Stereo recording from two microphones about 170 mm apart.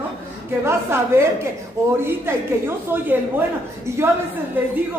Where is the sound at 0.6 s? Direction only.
15° right (ahead or behind).